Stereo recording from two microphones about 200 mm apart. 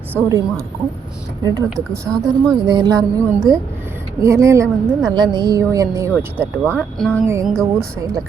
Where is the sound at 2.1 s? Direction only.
10° right (ahead or behind).